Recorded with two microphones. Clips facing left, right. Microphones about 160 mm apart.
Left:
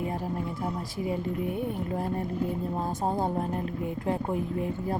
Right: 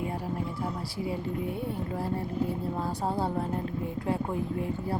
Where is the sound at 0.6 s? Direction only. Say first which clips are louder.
Left 1 dB; 20° left (ahead or behind).